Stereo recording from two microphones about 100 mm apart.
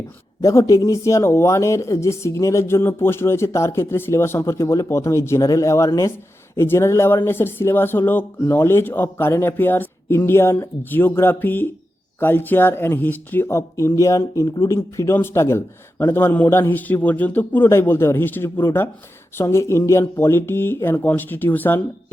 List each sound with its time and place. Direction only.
0.4 s speech: 35° left (ahead or behind)
14.8 s speech: 25° left (ahead or behind)